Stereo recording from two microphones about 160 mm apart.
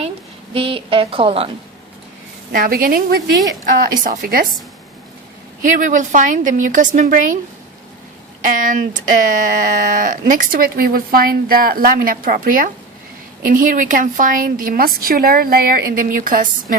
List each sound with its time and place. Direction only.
0.5 s a woman's voice: 35° right (ahead or behind)
2.5 s speech: 65° right (ahead or behind)
4.0 s speech: 60° right (ahead or behind)
5.6 s a woman's voice: 55° right (ahead or behind)
8.4 s speech: 55° right (ahead or behind)